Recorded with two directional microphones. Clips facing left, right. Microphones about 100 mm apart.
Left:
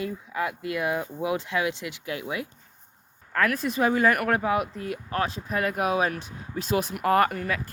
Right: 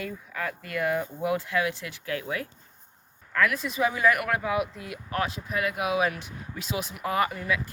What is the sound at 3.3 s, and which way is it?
Speech, 40° left (ahead or behind).